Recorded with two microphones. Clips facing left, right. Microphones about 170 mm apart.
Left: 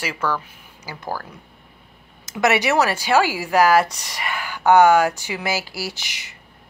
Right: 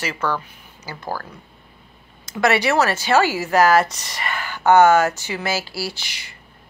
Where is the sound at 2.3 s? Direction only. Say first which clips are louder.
Even; 20° left (ahead or behind).